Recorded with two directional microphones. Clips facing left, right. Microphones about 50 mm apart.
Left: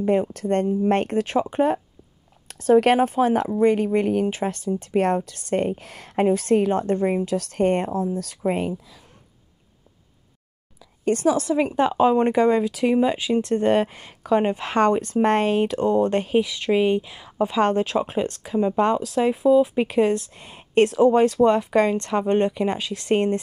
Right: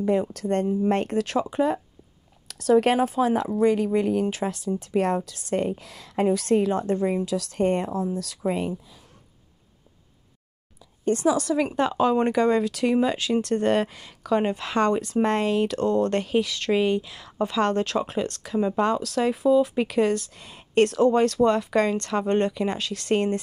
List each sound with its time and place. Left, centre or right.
0.0 s speech: left
1.2 s speech: left
1.5 s speech: left
2.4 s a sound: left
2.8 s a woman's voice: left
11.3 s speech: left
15.7 s speech: centre
20.8 s speech: centre